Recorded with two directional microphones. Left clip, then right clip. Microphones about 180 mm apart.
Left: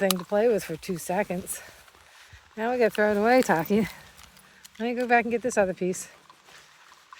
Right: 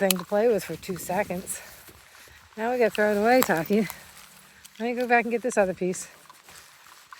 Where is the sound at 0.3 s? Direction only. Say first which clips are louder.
Even; 30° left (ahead or behind).